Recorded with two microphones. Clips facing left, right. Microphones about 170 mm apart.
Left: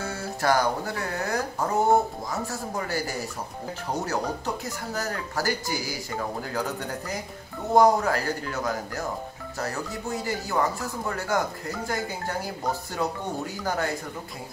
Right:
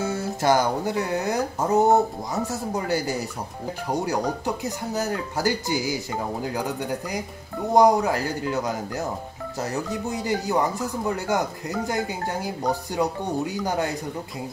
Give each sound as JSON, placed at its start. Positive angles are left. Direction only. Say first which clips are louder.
{"t": 0.0, "sound": "speech", "louder": "right 4 dB", "side_deg": -20}
{"t": 7.7, "sound": "speech", "louder": "right 2 dB", "side_deg": -15}